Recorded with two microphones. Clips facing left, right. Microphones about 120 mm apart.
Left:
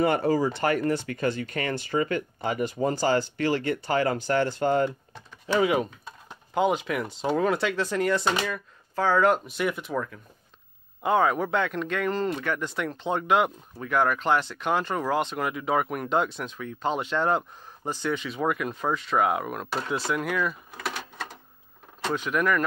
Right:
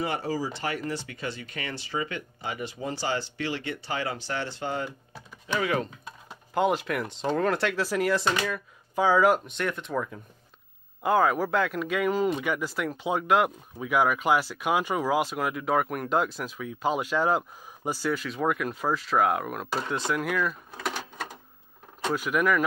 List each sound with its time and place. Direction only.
0.0 s speech: 55° left (ahead or behind)
5.6 s speech: 20° left (ahead or behind)
6.0 s speech: centre (ahead or behind)
9.6 s speech: 5° left (ahead or behind)
11.0 s speech: centre (ahead or behind)
22.0 s speech: 5° right (ahead or behind)